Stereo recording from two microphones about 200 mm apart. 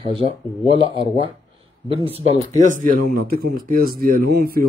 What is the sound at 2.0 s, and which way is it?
Speech, 30° right (ahead or behind).